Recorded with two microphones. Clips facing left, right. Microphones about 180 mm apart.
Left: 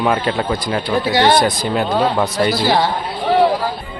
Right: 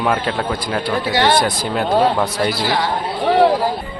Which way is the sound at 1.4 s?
5° right (ahead or behind).